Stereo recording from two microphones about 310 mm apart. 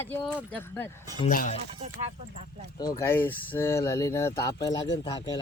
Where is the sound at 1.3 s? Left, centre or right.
Left.